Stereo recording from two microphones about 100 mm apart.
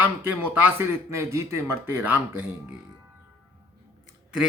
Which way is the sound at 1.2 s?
30° right (ahead or behind).